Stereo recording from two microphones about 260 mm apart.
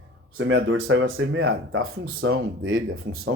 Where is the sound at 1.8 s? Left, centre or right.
Right.